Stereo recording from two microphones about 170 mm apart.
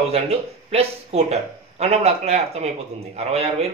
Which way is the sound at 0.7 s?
40° right (ahead or behind).